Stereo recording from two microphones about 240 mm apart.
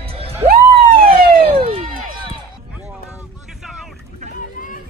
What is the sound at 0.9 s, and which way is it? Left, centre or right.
Emergency vehicle, right.